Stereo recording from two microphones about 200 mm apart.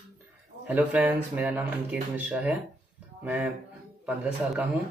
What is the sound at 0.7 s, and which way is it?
Speech, 10° right (ahead or behind).